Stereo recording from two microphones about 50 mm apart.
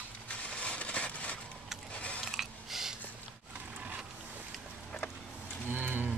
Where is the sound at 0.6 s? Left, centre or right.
Left.